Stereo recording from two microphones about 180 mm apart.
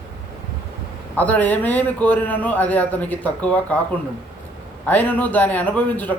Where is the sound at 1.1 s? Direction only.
10° left (ahead or behind).